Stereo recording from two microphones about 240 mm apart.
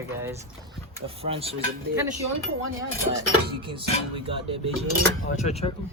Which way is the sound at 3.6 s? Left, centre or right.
Right.